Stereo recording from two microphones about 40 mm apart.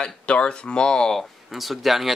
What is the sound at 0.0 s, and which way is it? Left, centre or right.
Speech, left.